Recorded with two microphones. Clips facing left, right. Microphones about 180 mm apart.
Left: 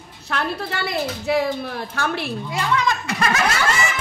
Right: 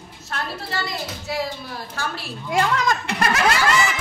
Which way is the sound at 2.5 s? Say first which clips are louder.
Right 2 dB; 45° right (ahead or behind).